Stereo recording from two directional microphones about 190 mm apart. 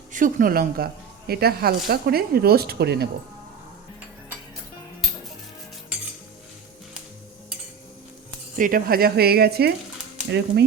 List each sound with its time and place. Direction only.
0.1 s speech: 45° right (ahead or behind); by 3.1 s 60° right (ahead or behind)
8.5 s speech: 45° right (ahead or behind); by 10.6 s 65° right (ahead or behind)